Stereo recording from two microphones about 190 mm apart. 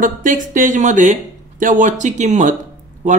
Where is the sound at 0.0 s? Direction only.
45° right (ahead or behind).